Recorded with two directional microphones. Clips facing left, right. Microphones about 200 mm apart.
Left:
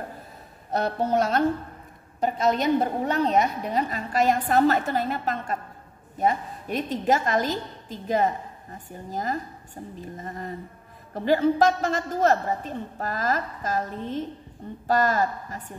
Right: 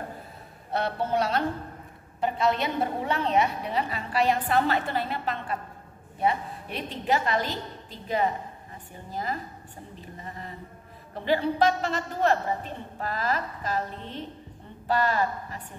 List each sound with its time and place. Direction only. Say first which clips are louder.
0.7 s a woman's voice: left 3 dB; 40° left (ahead or behind)